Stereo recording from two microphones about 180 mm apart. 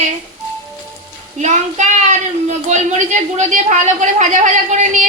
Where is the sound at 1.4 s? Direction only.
40° right (ahead or behind).